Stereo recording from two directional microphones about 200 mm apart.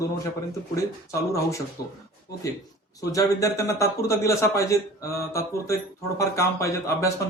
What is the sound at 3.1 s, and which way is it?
Speech, 15° left (ahead or behind).